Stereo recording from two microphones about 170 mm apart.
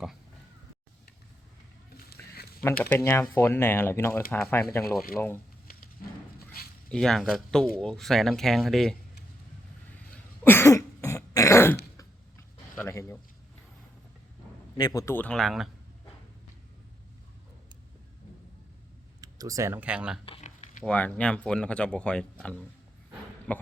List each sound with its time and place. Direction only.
2.3 s a sound: 65° left (ahead or behind)
2.9 s speech: 15° left (ahead or behind)
6.9 s speech: 5° left (ahead or behind)
10.4 s throat clearing: 15° left (ahead or behind)
11.9 s mechanisms: 15° left (ahead or behind)
14.8 s speech: 20° left (ahead or behind); by 15.7 s centre (ahead or behind)
19.2 s speech: 20° right (ahead or behind)
20.2 s a sound: 40° left (ahead or behind)
20.8 s speech: 10° left (ahead or behind)